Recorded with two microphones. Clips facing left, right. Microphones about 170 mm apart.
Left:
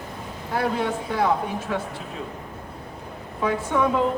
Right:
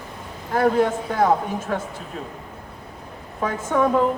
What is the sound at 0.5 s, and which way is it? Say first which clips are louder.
A man's voice: right 6 dB; 45° right (ahead or behind).